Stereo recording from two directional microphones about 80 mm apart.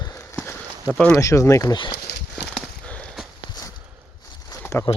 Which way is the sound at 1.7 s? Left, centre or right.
Left.